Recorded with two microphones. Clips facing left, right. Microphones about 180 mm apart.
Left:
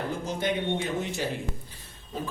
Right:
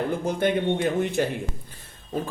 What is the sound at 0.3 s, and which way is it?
Speech, 55° right (ahead or behind).